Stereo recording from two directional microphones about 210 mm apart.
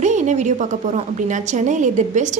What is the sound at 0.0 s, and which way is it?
A woman's voice, 35° right (ahead or behind).